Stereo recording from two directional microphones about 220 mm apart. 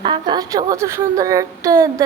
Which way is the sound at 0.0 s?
20° right (ahead or behind).